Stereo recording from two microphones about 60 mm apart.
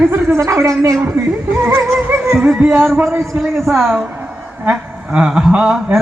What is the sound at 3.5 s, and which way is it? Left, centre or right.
Speech, right.